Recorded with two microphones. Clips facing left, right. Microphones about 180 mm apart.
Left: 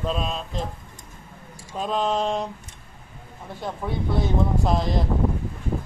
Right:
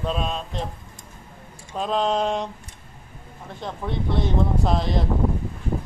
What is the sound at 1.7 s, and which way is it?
Speech, centre (ahead or behind).